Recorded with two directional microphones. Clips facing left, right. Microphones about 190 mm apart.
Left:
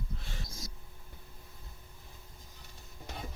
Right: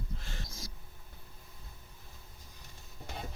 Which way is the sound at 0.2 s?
Centre (ahead or behind).